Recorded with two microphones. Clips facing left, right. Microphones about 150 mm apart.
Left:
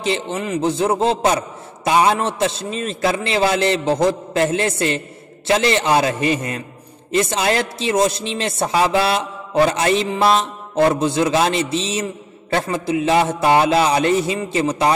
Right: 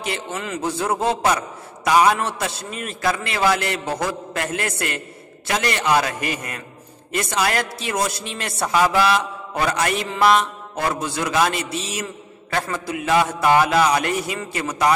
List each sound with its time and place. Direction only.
0.0 s a man's voice: 25° left (ahead or behind)